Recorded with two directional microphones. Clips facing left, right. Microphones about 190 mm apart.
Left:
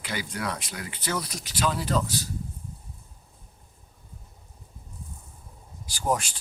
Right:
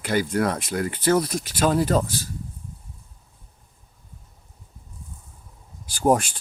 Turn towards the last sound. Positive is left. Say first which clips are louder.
# right 8 dB
turn(degrees=-55)  # may be behind; listen again after turning